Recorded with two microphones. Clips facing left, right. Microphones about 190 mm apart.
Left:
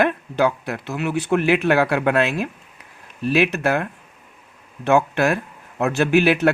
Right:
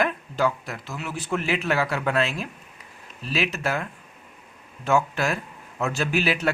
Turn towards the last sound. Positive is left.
turn(degrees=60)  # may be behind; listen again after turning